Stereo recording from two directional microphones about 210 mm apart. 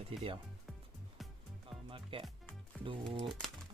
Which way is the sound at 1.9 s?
25° right (ahead or behind).